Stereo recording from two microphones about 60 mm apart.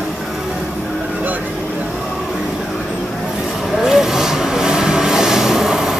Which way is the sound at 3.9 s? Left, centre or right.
Centre.